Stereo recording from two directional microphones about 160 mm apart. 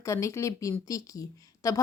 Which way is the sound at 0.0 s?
20° left (ahead or behind).